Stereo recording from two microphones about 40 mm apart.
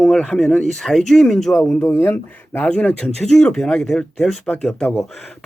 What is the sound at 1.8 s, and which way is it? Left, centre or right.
Speech, left.